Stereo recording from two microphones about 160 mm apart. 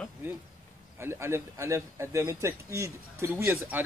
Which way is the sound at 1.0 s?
15° right (ahead or behind).